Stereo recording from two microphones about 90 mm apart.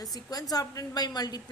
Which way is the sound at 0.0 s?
45° left (ahead or behind).